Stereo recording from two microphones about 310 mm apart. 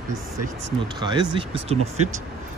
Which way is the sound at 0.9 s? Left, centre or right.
Centre.